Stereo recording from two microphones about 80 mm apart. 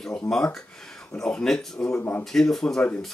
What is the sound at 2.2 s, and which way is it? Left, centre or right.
Speech, centre.